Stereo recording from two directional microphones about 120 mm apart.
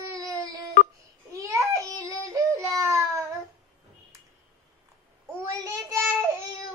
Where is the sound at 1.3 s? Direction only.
25° right (ahead or behind).